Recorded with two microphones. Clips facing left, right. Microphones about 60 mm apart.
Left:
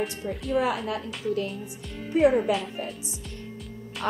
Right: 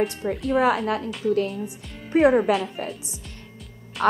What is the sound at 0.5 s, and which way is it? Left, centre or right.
Speech, right.